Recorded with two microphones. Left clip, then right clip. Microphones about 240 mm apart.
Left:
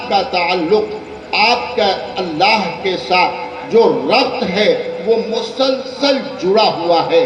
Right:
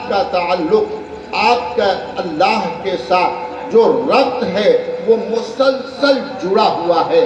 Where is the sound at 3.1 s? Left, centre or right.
Left.